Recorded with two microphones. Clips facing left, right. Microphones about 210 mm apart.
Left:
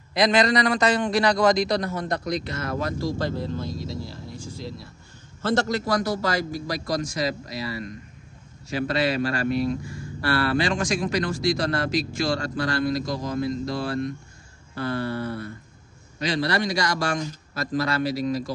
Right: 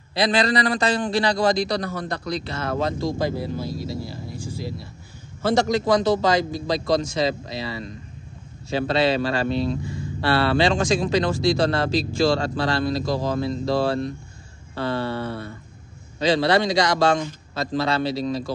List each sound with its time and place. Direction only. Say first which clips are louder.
0.1 s a man's voice: left 1 dB; 30° right (ahead or behind); by 4.8 s centre (ahead or behind)
5.4 s speech: right 3 dB; 10° right (ahead or behind); by 18.5 s 30° right (ahead or behind)